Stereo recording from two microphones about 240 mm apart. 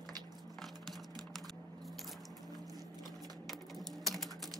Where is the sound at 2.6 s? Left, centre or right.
Centre.